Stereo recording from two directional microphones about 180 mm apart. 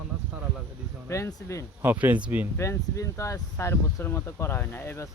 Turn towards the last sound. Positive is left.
turn(degrees=10)  # may be behind; listen again after turning